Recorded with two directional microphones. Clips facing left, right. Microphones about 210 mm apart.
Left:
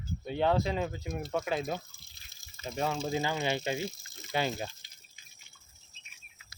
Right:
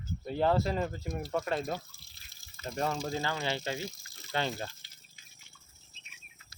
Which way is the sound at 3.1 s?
20° left (ahead or behind).